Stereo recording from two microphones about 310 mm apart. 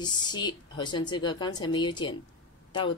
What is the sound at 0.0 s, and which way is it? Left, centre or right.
Speech, centre.